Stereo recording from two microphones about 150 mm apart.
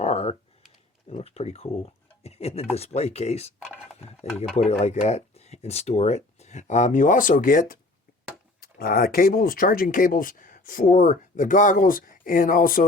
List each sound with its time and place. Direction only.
0.0 s computer keyboard: 45° left (ahead or behind)
1.1 s speech: 45° left (ahead or behind)
4.5 s speech: 45° left (ahead or behind); by 7.8 s 65° left (ahead or behind)
8.6 s speech: 75° left (ahead or behind)